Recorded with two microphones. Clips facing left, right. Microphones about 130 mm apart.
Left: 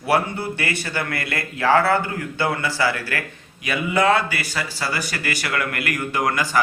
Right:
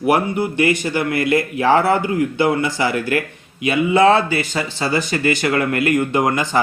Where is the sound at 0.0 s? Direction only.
20° right (ahead or behind).